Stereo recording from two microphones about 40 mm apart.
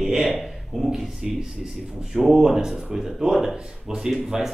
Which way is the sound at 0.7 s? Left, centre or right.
Centre.